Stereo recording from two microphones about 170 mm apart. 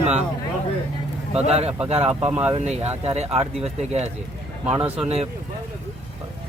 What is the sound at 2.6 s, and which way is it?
Speech, 40° right (ahead or behind).